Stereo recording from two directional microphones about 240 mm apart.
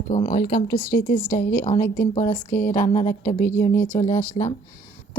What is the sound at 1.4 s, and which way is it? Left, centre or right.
Speech, left.